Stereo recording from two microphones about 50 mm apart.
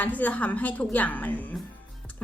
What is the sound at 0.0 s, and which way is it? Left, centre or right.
A woman's voice, left.